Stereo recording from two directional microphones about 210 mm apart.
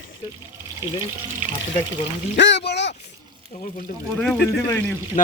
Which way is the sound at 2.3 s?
60° left (ahead or behind).